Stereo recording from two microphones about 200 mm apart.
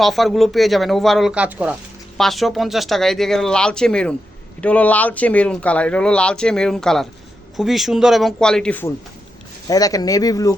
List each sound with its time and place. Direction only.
0.0 s speech: centre (ahead or behind)
9.6 s speech: 20° left (ahead or behind)